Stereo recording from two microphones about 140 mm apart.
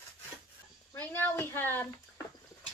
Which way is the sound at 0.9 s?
15° left (ahead or behind).